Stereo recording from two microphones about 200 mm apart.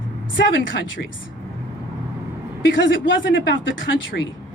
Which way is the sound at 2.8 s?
70° left (ahead or behind).